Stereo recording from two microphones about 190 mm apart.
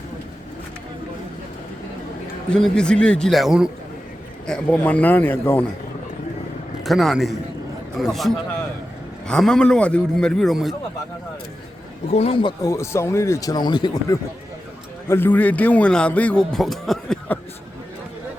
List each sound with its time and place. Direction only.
2.5 s a man's voice: 5° left (ahead or behind)
6.8 s a man's voice: centre (ahead or behind)
12.1 s a man's voice: 30° left (ahead or behind); by 17.4 s 5° left (ahead or behind)